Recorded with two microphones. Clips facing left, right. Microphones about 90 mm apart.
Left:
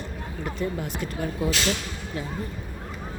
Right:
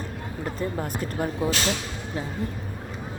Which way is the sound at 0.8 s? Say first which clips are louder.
Right 2 dB; 35° right (ahead or behind).